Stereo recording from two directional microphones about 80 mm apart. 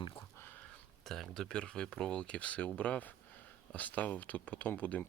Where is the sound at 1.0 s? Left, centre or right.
Centre.